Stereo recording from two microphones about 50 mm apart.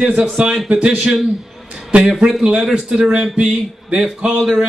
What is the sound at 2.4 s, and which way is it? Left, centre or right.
A man's voice, centre.